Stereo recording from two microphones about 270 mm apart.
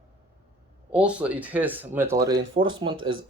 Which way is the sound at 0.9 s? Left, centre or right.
Centre.